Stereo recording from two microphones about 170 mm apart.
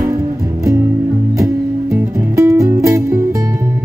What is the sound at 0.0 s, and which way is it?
Music, 20° right (ahead or behind).